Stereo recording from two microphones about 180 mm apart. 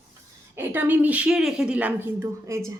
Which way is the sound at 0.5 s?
10° right (ahead or behind).